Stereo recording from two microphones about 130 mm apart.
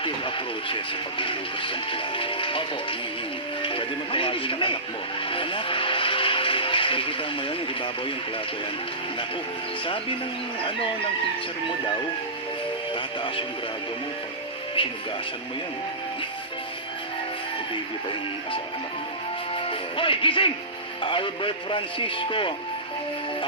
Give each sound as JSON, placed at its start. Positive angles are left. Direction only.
{"t": 0.0, "sound": "speech", "side_deg": 40}
{"t": 9.8, "sound": "speech", "side_deg": 40}
{"t": 12.9, "sound": "speech", "side_deg": 40}
{"t": 14.8, "sound": "speech", "side_deg": 40}
{"t": 19.5, "sound": "music", "side_deg": 40}
{"t": 21.0, "sound": "speech", "side_deg": 40}